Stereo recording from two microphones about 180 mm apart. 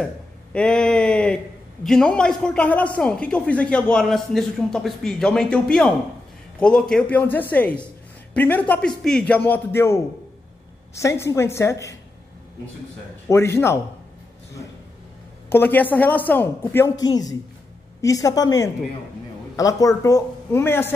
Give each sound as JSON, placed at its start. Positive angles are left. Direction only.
{"t": 0.0, "sound": "speech", "side_deg": 5}
{"t": 13.3, "sound": "speech", "side_deg": 15}
{"t": 15.5, "sound": "a woman's voice", "side_deg": 10}